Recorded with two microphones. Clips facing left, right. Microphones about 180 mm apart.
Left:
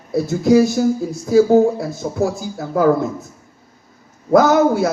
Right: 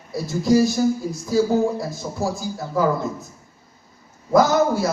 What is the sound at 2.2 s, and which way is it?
Speech, 60° left (ahead or behind).